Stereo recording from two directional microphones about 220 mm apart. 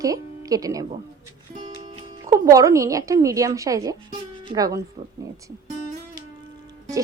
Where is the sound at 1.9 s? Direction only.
15° right (ahead or behind).